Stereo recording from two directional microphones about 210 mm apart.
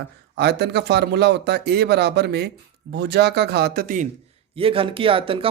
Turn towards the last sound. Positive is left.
turn(degrees=-25)  # may be behind; listen again after turning